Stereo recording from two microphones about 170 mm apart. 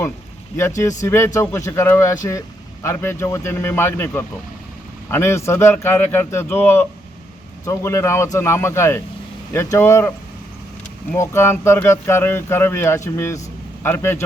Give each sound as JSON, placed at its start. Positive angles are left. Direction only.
{"t": 1.0, "sound": "speech", "side_deg": 15}
{"t": 11.1, "sound": "speech", "side_deg": 15}